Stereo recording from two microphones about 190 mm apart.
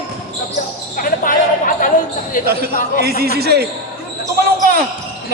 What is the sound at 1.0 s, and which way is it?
Speech, 45° left (ahead or behind).